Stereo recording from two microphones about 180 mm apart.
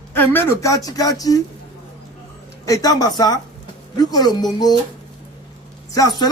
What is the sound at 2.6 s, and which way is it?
Speech, 20° left (ahead or behind).